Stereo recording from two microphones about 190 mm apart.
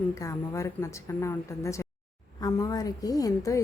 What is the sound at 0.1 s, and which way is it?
A woman's voice, 15° left (ahead or behind).